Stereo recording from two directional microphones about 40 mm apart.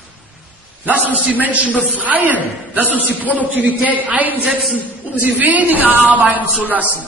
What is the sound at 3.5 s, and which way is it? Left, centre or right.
A man's voice, right.